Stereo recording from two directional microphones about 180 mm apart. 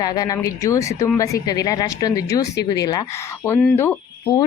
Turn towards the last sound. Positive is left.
turn(degrees=15)  # may be behind; listen again after turning